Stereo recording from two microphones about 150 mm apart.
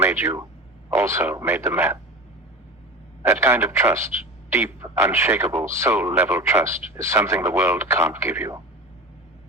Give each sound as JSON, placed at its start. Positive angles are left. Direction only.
{"t": 0.0, "sound": "speech", "side_deg": -15}
{"t": 3.2, "sound": "speech", "side_deg": -15}